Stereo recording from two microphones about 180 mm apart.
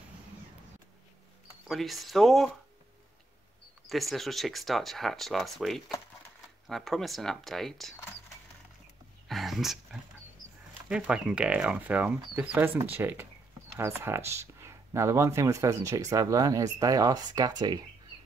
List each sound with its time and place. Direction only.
1.7 s speech: centre (ahead or behind)
3.8 s speech: centre (ahead or behind)
9.3 s a sound: centre (ahead or behind)
10.9 s speech: 5° right (ahead or behind); by 17.7 s 20° right (ahead or behind)